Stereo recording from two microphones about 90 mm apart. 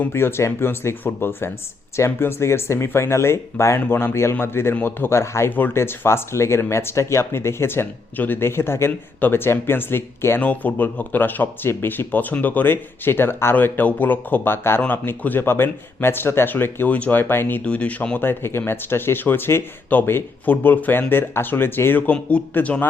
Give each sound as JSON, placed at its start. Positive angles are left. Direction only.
{"t": 0.0, "sound": "speech", "side_deg": 25}
{"t": 17.7, "sound": "speech", "side_deg": 15}